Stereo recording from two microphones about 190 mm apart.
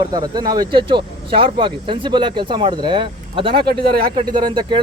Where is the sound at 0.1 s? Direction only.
20° right (ahead or behind).